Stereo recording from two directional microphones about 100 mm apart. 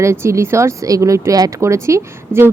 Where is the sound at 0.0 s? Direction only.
30° right (ahead or behind).